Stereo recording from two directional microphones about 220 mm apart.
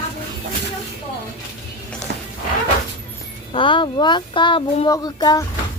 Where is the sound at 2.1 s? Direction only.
45° right (ahead or behind).